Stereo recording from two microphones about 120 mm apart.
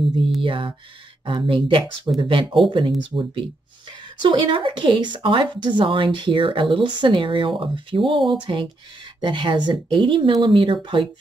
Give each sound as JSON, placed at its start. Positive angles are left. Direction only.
{"t": 0.4, "sound": "speech", "side_deg": -45}